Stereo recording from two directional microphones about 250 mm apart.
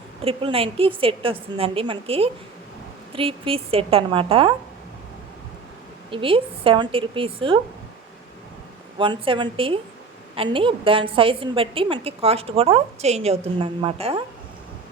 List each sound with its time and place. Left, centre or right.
0.3 s a woman's voice: right
6.1 s a woman's voice: right
9.0 s a woman's voice: centre